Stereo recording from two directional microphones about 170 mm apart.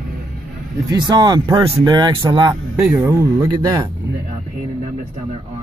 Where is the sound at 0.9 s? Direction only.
25° right (ahead or behind).